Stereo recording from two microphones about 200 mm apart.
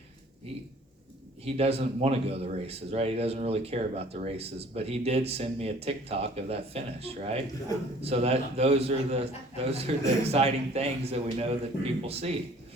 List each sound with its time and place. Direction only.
1.5 s speech: 30° right (ahead or behind)